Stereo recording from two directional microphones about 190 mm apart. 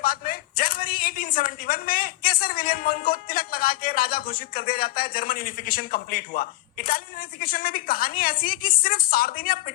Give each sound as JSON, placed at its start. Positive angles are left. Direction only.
{"t": 0.0, "sound": "a man's voice", "side_deg": 50}